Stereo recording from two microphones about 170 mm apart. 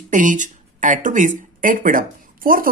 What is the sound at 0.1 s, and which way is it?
Speech, 50° right (ahead or behind).